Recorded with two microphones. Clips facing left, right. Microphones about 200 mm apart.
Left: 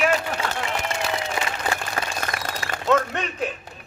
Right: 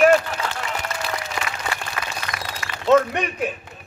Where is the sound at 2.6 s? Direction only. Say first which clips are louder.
Left 3 dB; 35° left (ahead or behind).